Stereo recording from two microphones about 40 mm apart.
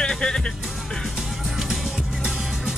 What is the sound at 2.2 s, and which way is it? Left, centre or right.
Music, centre.